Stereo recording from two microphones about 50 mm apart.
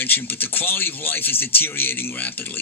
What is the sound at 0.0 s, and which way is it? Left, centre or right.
A man's voice, left.